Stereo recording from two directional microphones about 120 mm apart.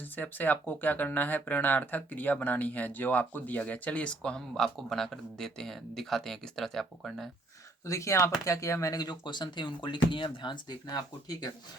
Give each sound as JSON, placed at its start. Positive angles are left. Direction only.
{"t": 0.2, "sound": "speech", "side_deg": 15}
{"t": 7.9, "sound": "speech", "side_deg": 25}